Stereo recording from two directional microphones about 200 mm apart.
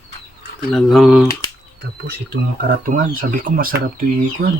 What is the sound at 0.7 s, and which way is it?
Speech, centre (ahead or behind).